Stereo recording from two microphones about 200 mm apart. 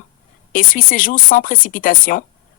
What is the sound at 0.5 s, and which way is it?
Speech, 45° left (ahead or behind).